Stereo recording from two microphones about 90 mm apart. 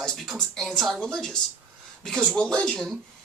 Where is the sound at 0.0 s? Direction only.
5° left (ahead or behind).